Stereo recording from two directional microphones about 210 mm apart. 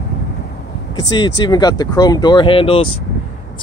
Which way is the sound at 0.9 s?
20° left (ahead or behind).